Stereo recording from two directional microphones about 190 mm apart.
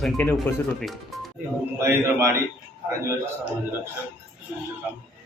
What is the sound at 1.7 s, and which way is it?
Speech, 15° right (ahead or behind).